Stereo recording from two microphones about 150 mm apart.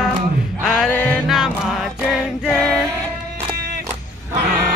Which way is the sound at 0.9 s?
10° left (ahead or behind).